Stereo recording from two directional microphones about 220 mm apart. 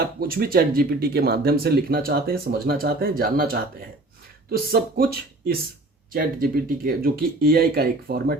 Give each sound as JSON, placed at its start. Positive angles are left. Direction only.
{"t": 0.0, "sound": "speech", "side_deg": -40}